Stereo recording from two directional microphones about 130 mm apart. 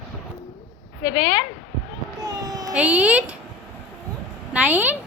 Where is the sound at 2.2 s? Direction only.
30° right (ahead or behind).